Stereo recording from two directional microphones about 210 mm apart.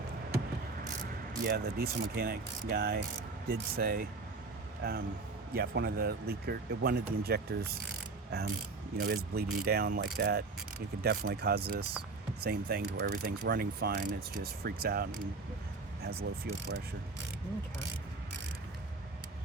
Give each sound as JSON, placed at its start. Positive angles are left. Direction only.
{"t": 1.5, "sound": "speech", "side_deg": -50}
{"t": 9.0, "sound": "speech", "side_deg": -50}
{"t": 16.5, "sound": "mechanisms", "side_deg": -55}